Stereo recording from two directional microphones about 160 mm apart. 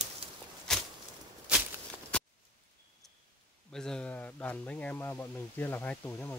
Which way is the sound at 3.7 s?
5° left (ahead or behind).